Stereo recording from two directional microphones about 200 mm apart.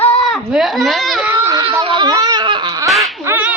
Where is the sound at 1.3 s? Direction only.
15° right (ahead or behind).